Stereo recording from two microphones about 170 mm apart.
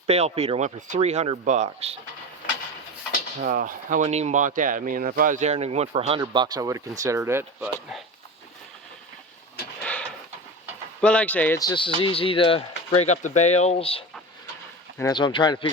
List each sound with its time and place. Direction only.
0.1 s speech: 40° right (ahead or behind)
3.4 s speech: 50° right (ahead or behind)
6.1 s speech: 25° right (ahead or behind)
9.8 s pant: 5° left (ahead or behind)
11.0 s speech: 5° left (ahead or behind)
11.6 s speech: 25° left (ahead or behind)
13.0 s speech: 45° left (ahead or behind)
15.1 s speech: 25° left (ahead or behind)